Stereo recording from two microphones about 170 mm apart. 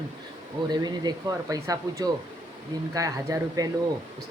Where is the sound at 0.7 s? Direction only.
25° right (ahead or behind).